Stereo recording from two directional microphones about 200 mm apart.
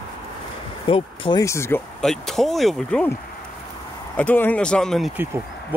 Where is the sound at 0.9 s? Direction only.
20° left (ahead or behind).